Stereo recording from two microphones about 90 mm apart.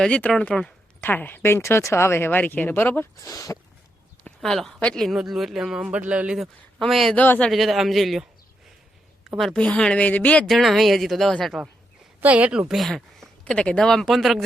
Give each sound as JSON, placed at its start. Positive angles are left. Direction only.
{"t": 0.0, "sound": "speech", "side_deg": 15}
{"t": 1.0, "sound": "speech", "side_deg": 25}
{"t": 3.2, "sound": "speech", "side_deg": 35}
{"t": 4.4, "sound": "speech", "side_deg": 5}
{"t": 5.0, "sound": "a man's voice", "side_deg": -5}
{"t": 5.8, "sound": "a man's voice", "side_deg": -15}
{"t": 7.2, "sound": "speech", "side_deg": 15}
{"t": 7.5, "sound": "a man's voice", "side_deg": 0}
{"t": 9.4, "sound": "a man's voice", "side_deg": 0}
{"t": 9.6, "sound": "speech", "side_deg": 10}
{"t": 10.5, "sound": "a man's voice", "side_deg": 0}
{"t": 12.2, "sound": "a man's voice", "side_deg": -15}